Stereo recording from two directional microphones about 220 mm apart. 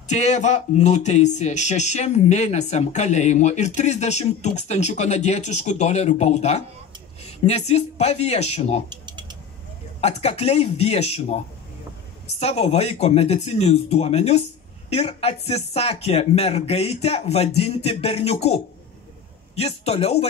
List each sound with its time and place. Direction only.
0.1 s speech: 30° left (ahead or behind)
8.8 s a sound: 20° right (ahead or behind)
9.9 s speech: 30° left (ahead or behind)